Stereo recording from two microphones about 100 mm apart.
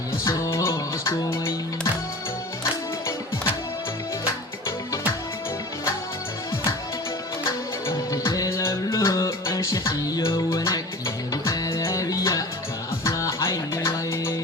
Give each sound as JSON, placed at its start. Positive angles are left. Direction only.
{"t": 0.3, "sound": "music", "side_deg": 30}
{"t": 7.9, "sound": "music", "side_deg": 30}